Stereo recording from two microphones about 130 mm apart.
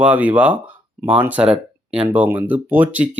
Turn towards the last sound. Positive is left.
turn(degrees=-10)  # may be behind; listen again after turning